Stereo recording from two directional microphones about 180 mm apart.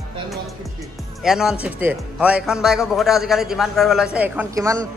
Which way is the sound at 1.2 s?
5° right (ahead or behind).